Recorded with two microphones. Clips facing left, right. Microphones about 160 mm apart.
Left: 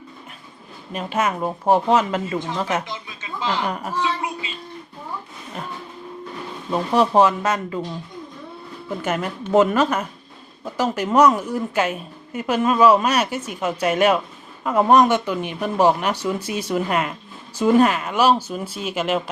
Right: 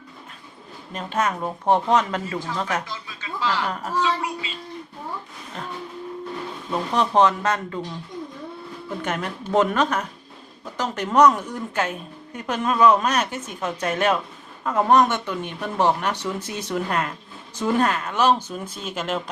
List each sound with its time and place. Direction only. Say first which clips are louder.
0.9 s a woman's voice: left 2 dB; 10° left (ahead or behind)
2.8 s a woman's voice: left 2 dB; 20° left (ahead or behind)
6.7 s a woman's voice: left 5 dB; 10° left (ahead or behind)
9.0 s a woman's voice: left 3 dB; 5° left (ahead or behind)